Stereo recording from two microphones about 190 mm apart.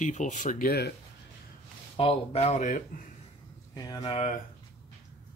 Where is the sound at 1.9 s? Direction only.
30° left (ahead or behind).